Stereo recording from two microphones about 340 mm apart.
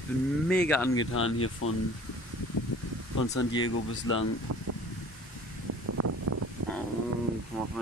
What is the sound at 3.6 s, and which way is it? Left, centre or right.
Speech, left.